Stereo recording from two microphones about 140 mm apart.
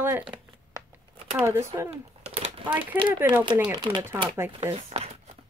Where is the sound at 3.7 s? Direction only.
30° right (ahead or behind).